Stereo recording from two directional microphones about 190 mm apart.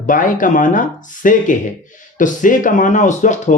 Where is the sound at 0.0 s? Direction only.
45° left (ahead or behind).